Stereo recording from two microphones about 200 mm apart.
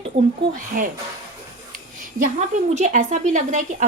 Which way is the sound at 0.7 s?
45° right (ahead or behind).